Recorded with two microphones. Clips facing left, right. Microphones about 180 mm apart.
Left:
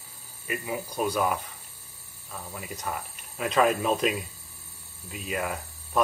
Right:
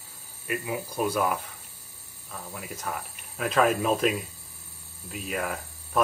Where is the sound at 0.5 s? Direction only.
5° right (ahead or behind).